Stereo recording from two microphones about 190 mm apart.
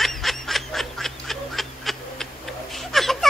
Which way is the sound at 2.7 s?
Centre (ahead or behind).